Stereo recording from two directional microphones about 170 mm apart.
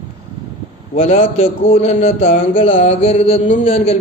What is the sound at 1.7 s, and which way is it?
A man's voice, 40° left (ahead or behind).